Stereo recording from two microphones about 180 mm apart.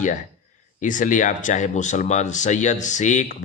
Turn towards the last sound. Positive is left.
turn(degrees=40)  # may be behind; listen again after turning